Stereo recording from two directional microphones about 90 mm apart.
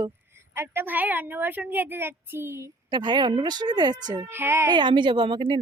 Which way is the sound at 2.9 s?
55° right (ahead or behind).